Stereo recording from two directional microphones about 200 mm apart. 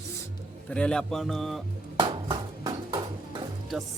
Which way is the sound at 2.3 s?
20° right (ahead or behind).